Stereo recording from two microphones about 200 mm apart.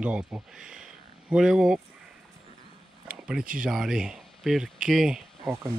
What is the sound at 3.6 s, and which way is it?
Speech, centre (ahead or behind).